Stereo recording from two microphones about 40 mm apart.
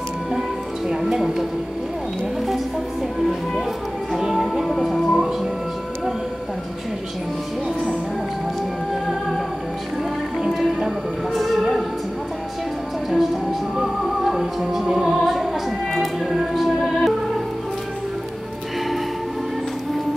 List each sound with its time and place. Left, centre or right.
0.8 s speech: centre
4.2 s music: centre
4.5 s music: centre
10.5 s music: centre
13.1 s music: centre